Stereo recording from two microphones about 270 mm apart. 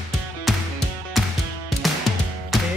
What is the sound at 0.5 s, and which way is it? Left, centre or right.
Music, centre.